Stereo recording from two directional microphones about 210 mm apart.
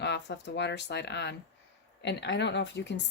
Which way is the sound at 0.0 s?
55° left (ahead or behind).